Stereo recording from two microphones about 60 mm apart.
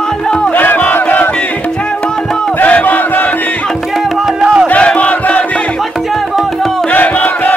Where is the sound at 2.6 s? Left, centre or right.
Left.